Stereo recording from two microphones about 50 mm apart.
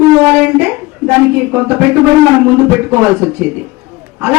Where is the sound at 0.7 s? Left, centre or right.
Right.